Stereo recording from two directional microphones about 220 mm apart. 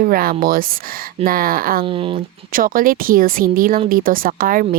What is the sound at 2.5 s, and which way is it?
A woman's voice, 40° right (ahead or behind).